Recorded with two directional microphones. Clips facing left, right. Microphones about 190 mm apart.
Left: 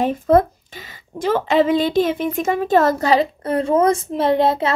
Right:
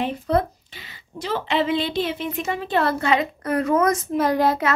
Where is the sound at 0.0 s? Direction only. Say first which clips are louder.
Left 7 dB; 45° left (ahead or behind).